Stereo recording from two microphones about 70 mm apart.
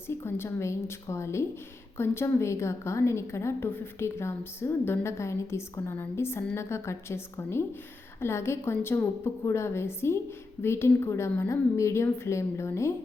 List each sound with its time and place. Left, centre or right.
0.1 s a woman's voice: left
8.2 s a woman's voice: left